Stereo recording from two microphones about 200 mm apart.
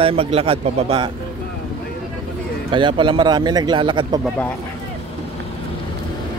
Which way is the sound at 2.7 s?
25° right (ahead or behind).